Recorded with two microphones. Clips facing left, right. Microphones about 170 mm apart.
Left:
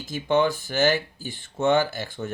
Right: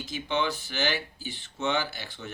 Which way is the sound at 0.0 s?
45° left (ahead or behind).